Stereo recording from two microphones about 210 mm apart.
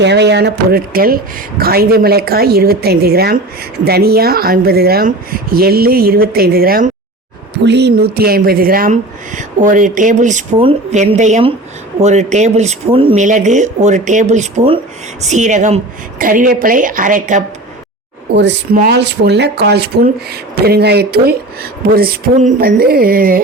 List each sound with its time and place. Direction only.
0.0 s speech: 55° right (ahead or behind); by 17.4 s 40° right (ahead or behind)
18.3 s a woman's voice: 55° right (ahead or behind)